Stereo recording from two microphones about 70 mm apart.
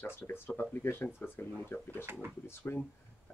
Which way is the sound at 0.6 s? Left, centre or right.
Left.